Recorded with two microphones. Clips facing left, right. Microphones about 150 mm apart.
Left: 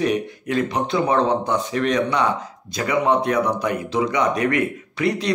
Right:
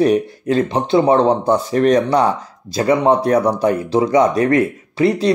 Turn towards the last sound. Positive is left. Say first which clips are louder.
# right 6 dB
turn(degrees=-30)  # may be behind; listen again after turning